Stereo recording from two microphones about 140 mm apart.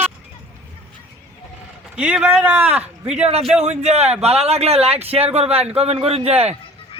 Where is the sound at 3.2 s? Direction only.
45° right (ahead or behind).